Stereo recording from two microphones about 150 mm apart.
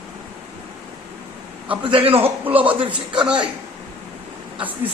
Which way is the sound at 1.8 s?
35° right (ahead or behind).